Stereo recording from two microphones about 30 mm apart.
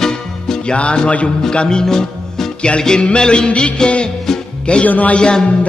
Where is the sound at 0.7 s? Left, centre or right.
Left.